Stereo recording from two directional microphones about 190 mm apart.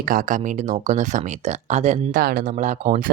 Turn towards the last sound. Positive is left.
turn(degrees=-45)  # may be behind; listen again after turning